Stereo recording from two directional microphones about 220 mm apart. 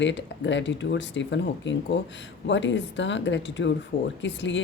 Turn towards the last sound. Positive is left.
turn(degrees=55)  # may be behind; listen again after turning